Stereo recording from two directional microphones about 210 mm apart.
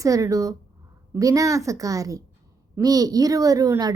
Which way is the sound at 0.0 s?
15° right (ahead or behind).